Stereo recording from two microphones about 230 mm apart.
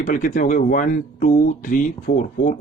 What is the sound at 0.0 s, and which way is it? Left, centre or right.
Speech, left.